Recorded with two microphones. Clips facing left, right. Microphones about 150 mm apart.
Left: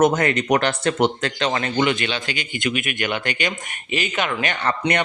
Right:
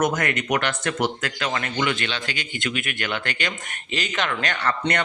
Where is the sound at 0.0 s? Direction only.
30° left (ahead or behind).